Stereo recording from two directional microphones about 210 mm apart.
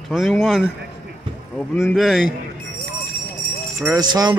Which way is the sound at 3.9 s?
20° right (ahead or behind).